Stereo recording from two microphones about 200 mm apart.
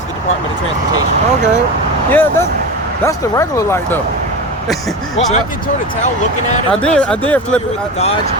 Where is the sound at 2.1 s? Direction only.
10° left (ahead or behind).